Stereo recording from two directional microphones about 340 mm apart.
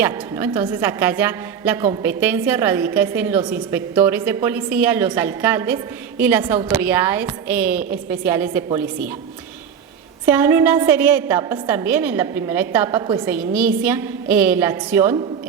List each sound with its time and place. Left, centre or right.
0.0 s a woman's voice: centre
10.2 s a woman's voice: centre